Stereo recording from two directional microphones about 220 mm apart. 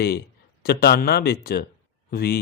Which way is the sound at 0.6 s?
45° left (ahead or behind).